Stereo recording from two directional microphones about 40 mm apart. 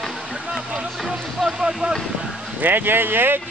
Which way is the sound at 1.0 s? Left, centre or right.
Centre.